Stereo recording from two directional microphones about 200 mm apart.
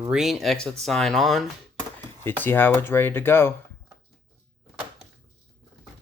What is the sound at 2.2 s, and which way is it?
Speech, 10° left (ahead or behind).